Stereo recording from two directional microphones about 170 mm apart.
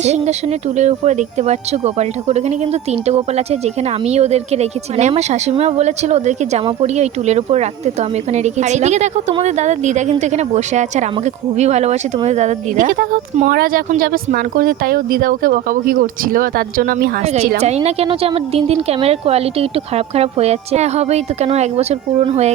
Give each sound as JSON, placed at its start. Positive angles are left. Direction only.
{"t": 0.0, "sound": "speech", "side_deg": -40}
{"t": 17.6, "sound": "speech", "side_deg": -40}